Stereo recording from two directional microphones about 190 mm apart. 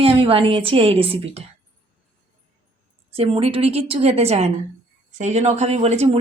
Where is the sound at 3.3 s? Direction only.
30° right (ahead or behind).